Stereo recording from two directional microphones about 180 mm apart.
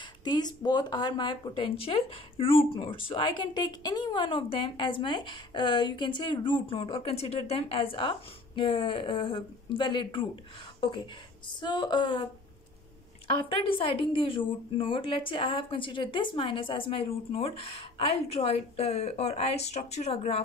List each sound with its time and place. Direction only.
0.2 s speech: 25° left (ahead or behind)
11.6 s speech: 25° left (ahead or behind)
13.7 s speech: 30° left (ahead or behind)